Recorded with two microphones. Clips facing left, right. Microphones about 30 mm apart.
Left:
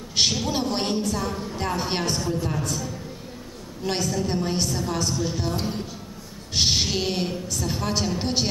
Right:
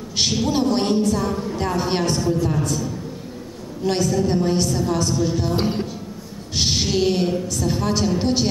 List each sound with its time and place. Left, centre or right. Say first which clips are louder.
0.1 s a woman's voice: right 2 dB; centre
5.6 s speech: right 7 dB; right
6.5 s a woman's voice: right 2 dB; centre